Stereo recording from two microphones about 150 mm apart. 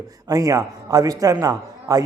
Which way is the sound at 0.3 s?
25° right (ahead or behind).